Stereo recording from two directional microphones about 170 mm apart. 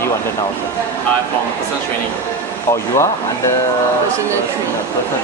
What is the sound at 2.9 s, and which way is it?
Speech, 15° left (ahead or behind).